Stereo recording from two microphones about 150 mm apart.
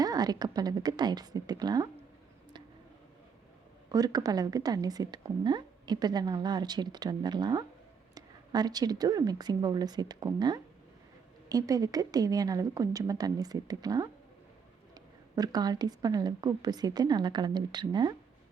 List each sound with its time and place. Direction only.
0.0 s a woman's voice: 25° right (ahead or behind)
3.9 s a woman's voice: 25° right (ahead or behind)
15.4 s a woman's voice: 25° right (ahead or behind)